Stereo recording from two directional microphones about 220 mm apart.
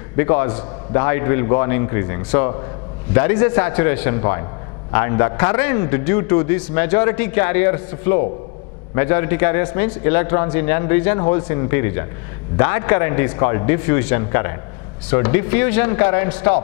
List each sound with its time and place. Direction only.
0.1 s a man's voice: 15° left (ahead or behind)